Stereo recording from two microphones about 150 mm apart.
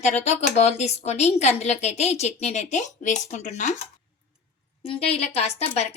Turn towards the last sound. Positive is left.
turn(degrees=45)  # may be behind; listen again after turning